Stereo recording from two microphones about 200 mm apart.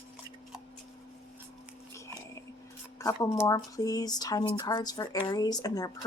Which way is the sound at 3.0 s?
15° left (ahead or behind).